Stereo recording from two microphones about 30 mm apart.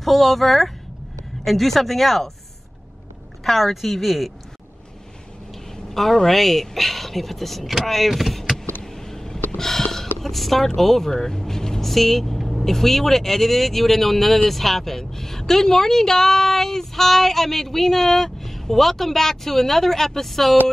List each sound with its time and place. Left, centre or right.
0.0 s speech: centre
3.4 s speech: centre
6.2 s speech: centre
8.1 s speech: centre
8.5 s vehicle: centre
9.6 s a sound: centre
10.1 s speech: centre
11.8 s speech: centre